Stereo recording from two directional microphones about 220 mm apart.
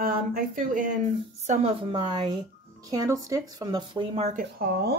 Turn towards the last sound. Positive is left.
turn(degrees=-45)  # may be behind; listen again after turning